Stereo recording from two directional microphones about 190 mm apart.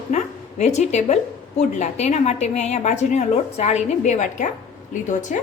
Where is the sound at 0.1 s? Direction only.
35° left (ahead or behind).